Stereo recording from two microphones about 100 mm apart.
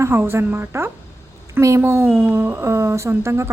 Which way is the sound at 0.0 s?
25° right (ahead or behind).